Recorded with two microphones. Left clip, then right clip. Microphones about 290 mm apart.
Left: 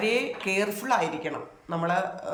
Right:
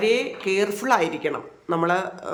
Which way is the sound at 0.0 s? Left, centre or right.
Centre.